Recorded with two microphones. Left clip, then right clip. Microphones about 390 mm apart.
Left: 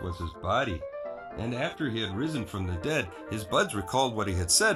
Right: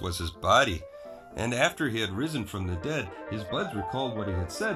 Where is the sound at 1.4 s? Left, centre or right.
Right.